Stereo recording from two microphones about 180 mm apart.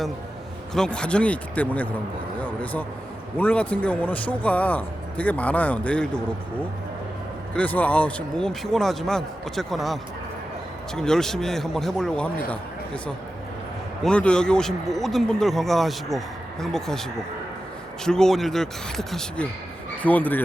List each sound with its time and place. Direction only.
0.7 s a man's voice: 5° left (ahead or behind)
7.5 s speech: 10° left (ahead or behind)
14.0 s a man's voice: 5° left (ahead or behind)